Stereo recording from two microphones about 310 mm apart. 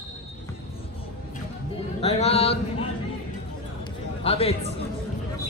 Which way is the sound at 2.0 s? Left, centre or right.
Centre.